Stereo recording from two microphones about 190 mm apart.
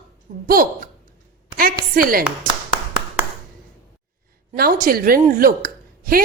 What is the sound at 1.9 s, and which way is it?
Speech, 50° right (ahead or behind).